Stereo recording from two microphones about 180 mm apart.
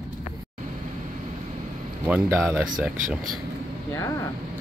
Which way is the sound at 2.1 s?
10° right (ahead or behind).